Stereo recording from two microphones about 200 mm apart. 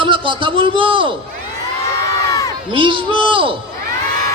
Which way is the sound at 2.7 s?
25° right (ahead or behind).